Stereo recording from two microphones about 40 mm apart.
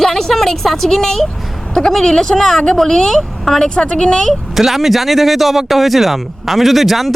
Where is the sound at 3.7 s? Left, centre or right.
Centre.